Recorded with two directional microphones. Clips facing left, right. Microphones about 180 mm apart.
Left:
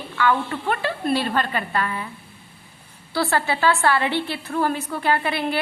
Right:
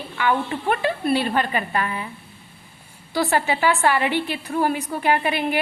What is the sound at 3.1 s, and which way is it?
A woman's voice, 15° right (ahead or behind).